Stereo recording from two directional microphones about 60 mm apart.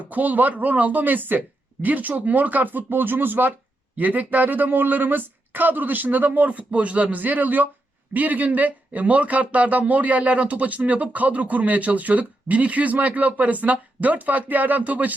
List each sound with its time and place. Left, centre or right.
0.0 s speech: right